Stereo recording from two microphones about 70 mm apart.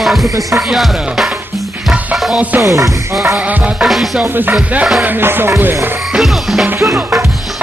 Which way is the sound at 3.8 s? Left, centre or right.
Centre.